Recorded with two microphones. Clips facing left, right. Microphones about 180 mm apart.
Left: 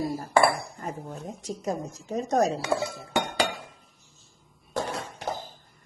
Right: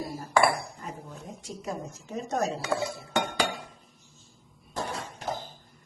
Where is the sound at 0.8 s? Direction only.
50° left (ahead or behind).